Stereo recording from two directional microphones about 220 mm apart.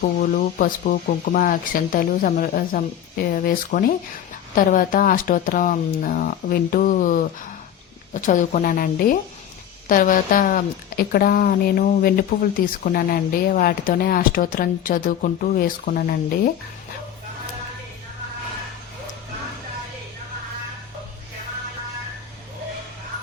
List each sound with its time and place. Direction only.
0.0 s a woman's voice: 40° left (ahead or behind)